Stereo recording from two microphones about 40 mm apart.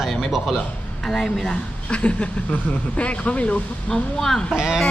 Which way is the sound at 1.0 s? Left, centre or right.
Centre.